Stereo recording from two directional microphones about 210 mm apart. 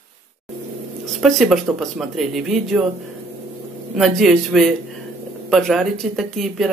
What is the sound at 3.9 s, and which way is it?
Speech, centre (ahead or behind).